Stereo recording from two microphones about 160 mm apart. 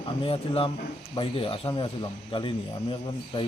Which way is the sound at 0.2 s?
35° left (ahead or behind).